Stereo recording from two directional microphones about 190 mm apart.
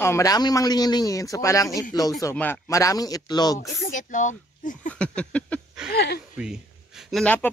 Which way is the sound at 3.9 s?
40° left (ahead or behind).